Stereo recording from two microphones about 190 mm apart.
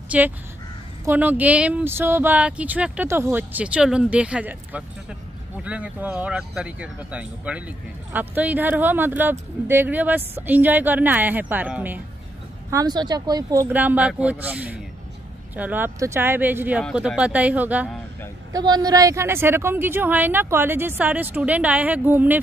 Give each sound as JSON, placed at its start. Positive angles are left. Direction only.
{"t": 0.1, "sound": "speech", "side_deg": -5}
{"t": 12.7, "sound": "speech", "side_deg": -20}
{"t": 18.5, "sound": "speech", "side_deg": -20}